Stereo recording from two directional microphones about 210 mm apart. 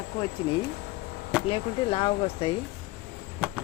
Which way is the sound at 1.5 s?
25° left (ahead or behind).